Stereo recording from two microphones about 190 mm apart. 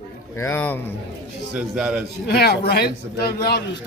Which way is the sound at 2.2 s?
60° left (ahead or behind).